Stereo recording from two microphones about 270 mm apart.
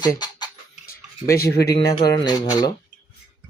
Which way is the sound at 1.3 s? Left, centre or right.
Left.